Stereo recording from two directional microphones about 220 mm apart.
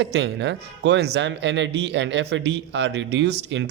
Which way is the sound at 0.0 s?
55° right (ahead or behind).